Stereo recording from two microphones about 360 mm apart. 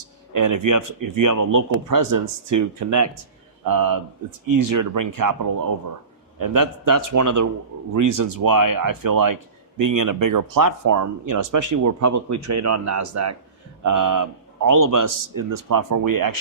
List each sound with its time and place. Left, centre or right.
0.3 s speech: right
3.6 s speech: right